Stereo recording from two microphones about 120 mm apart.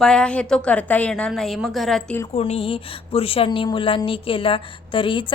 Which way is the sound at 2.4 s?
55° left (ahead or behind).